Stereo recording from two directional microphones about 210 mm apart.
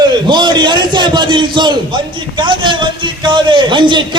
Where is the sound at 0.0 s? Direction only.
20° right (ahead or behind).